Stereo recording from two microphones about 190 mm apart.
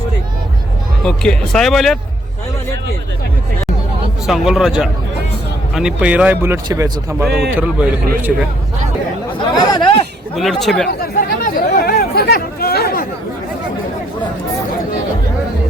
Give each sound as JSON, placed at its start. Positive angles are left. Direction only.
{"t": 1.0, "sound": "speech", "side_deg": 5}
{"t": 4.3, "sound": "speech", "side_deg": 0}
{"t": 7.3, "sound": "a man's voice", "side_deg": -55}
{"t": 7.5, "sound": "speech", "side_deg": -10}
{"t": 9.4, "sound": "speech", "side_deg": 25}
{"t": 10.3, "sound": "speech", "side_deg": 0}
{"t": 10.8, "sound": "chatter", "side_deg": 50}